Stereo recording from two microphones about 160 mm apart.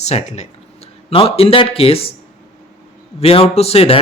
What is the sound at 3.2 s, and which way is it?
Speech, 40° left (ahead or behind).